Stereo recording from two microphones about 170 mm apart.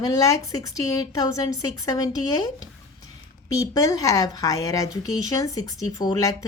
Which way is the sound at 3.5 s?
20° left (ahead or behind).